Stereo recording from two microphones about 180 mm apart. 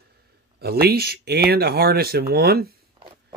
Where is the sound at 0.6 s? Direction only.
60° right (ahead or behind).